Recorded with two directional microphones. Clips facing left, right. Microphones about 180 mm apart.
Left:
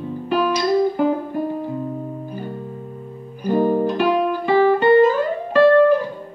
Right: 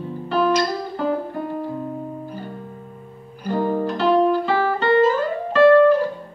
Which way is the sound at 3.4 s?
15° left (ahead or behind).